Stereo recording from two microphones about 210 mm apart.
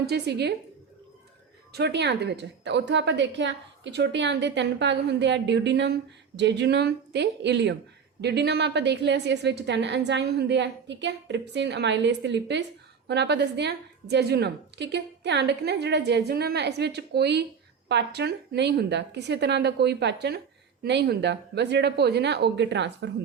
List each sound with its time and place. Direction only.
0.0 s a woman's voice: 50° right (ahead or behind)
1.7 s a woman's voice: 55° right (ahead or behind)